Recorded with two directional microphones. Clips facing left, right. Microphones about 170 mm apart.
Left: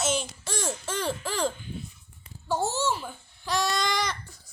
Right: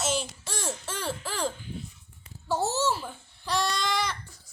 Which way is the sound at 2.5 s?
5° right (ahead or behind).